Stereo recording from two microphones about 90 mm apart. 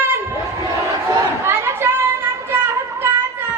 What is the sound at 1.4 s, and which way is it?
Chatter, 25° right (ahead or behind).